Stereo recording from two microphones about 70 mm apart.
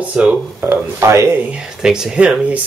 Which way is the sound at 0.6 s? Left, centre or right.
Right.